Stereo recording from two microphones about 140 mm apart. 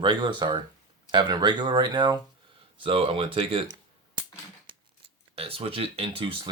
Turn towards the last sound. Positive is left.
turn(degrees=-40)  # may be behind; listen again after turning